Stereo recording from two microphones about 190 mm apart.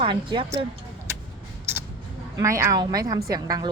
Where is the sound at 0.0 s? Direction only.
25° right (ahead or behind).